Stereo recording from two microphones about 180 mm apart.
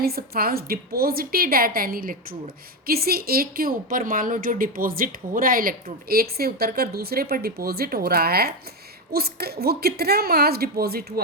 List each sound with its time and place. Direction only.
0.0 s a woman's voice: 60° right (ahead or behind)